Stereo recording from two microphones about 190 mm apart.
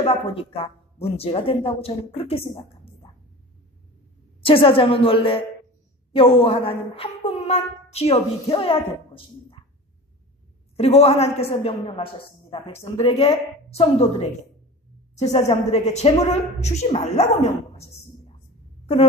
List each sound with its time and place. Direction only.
0.0 s speech: 30° left (ahead or behind)
2.5 s a sound: 25° left (ahead or behind)
4.5 s a woman's voice: 30° left (ahead or behind)
10.8 s a woman's voice: 35° left (ahead or behind)
15.1 s speech: 35° left (ahead or behind)